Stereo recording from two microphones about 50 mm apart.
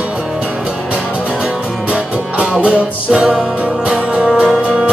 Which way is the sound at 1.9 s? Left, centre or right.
Right.